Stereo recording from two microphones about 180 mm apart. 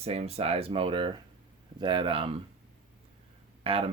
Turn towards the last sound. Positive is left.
turn(degrees=-30)  # may be behind; listen again after turning